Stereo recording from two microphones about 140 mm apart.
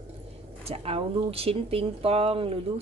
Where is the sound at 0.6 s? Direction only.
45° right (ahead or behind).